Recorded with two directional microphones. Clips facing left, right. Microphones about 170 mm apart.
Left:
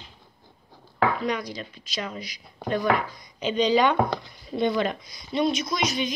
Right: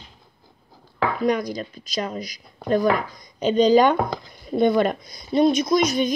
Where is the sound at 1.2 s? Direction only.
45° right (ahead or behind).